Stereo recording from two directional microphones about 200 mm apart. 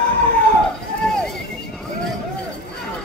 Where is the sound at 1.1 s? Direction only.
Centre (ahead or behind).